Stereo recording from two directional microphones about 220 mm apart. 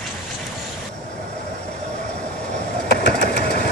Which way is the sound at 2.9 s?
50° left (ahead or behind).